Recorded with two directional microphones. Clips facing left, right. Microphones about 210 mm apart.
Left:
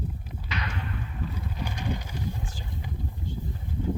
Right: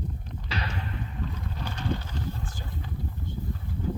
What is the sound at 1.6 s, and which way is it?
Speech, 15° left (ahead or behind).